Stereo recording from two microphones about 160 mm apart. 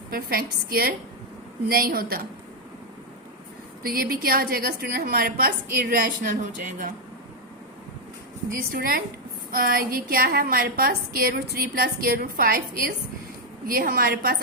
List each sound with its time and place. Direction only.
0.1 s a woman's voice: 70° right (ahead or behind)
3.8 s a woman's voice: 70° right (ahead or behind)
8.4 s a woman's voice: 65° right (ahead or behind)